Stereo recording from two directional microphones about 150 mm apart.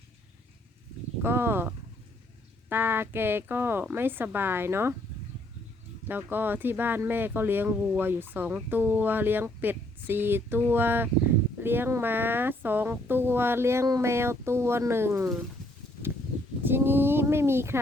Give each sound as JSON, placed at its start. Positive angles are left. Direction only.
{"t": 1.2, "sound": "speech", "side_deg": -15}
{"t": 6.1, "sound": "speech", "side_deg": -10}
{"t": 16.6, "sound": "speech", "side_deg": -15}